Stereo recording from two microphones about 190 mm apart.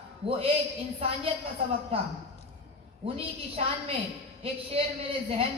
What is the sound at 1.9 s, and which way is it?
A woman's voice, 30° right (ahead or behind).